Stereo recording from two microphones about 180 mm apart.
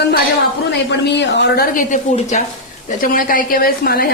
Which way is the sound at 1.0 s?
75° left (ahead or behind).